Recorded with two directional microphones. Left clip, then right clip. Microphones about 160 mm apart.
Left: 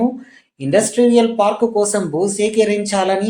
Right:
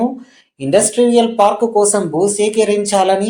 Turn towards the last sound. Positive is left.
turn(degrees=-30)  # may be behind; listen again after turning